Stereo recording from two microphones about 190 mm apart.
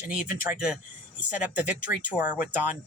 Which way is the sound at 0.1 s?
5° right (ahead or behind).